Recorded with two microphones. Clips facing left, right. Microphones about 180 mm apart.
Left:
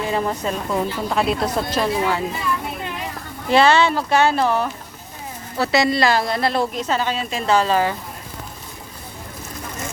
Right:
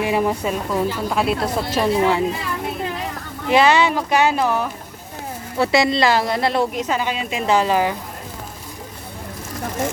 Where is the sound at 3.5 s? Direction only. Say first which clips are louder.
Even; 10° right (ahead or behind).